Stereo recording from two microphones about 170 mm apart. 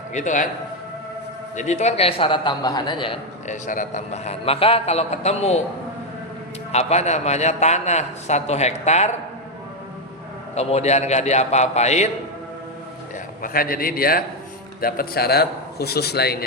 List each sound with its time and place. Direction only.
0.1 s a man's voice: 45° left (ahead or behind)
1.5 s a man's voice: 45° left (ahead or behind)
3.4 s a man's voice: 50° left (ahead or behind)
6.7 s a man's voice: 40° left (ahead or behind)
10.5 s a man's voice: 40° left (ahead or behind)
13.4 s a man's voice: 60° left (ahead or behind)